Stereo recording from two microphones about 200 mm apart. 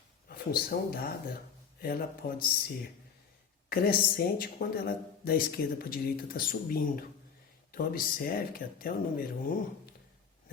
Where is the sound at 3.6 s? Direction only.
50° left (ahead or behind).